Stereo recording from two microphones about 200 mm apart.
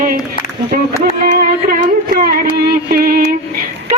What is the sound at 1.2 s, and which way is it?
Music, 45° right (ahead or behind).